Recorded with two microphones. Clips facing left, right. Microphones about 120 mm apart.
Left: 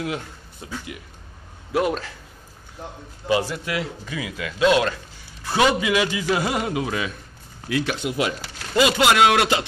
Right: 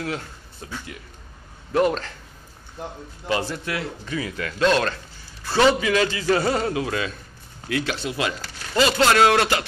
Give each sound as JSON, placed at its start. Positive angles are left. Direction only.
{"t": 0.0, "sound": "speech", "side_deg": 15}
{"t": 3.3, "sound": "speech", "side_deg": 15}